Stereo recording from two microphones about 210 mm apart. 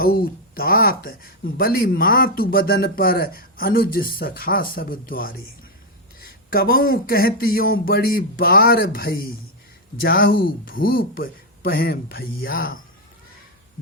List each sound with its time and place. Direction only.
0.0 s speech: 45° left (ahead or behind)
6.5 s speech: 45° left (ahead or behind)